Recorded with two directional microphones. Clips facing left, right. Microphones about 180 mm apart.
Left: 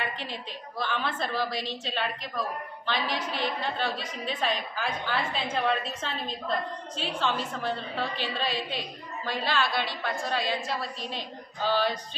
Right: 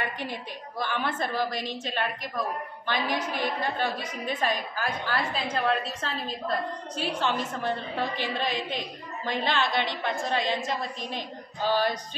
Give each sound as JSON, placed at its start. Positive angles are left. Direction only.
{"t": 0.2, "sound": "a woman's voice", "side_deg": -15}
{"t": 7.0, "sound": "a woman's voice", "side_deg": -15}